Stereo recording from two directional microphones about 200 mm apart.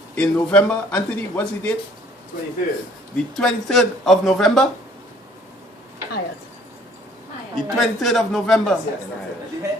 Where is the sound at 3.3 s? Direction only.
Centre (ahead or behind).